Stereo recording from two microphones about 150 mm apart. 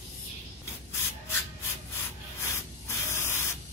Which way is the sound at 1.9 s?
20° left (ahead or behind).